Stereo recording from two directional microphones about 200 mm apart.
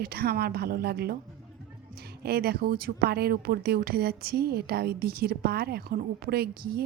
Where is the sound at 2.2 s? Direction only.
50° right (ahead or behind).